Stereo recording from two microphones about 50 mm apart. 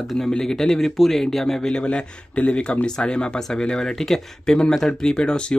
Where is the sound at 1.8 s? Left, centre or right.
Left.